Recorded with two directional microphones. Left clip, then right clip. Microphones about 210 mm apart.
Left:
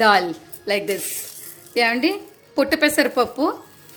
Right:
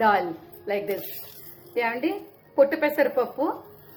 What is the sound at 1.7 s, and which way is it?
A woman's voice, 45° left (ahead or behind).